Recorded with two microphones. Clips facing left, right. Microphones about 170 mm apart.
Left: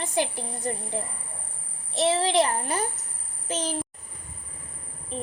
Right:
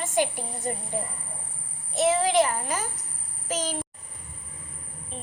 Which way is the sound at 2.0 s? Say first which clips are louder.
Right 1 dB; 35° left (ahead or behind).